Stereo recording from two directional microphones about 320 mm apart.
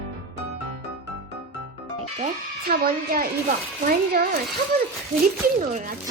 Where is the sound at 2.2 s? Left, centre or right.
Right.